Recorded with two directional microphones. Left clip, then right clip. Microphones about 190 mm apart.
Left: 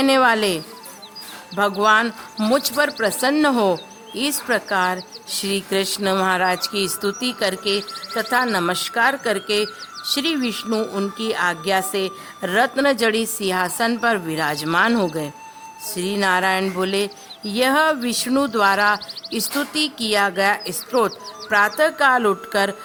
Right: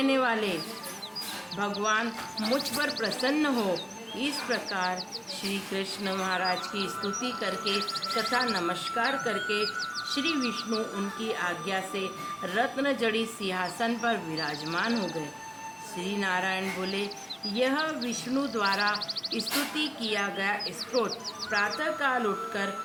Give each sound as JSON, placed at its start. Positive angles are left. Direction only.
{"t": 0.0, "sound": "speech", "side_deg": 55}
{"t": 1.8, "sound": "speech", "side_deg": 60}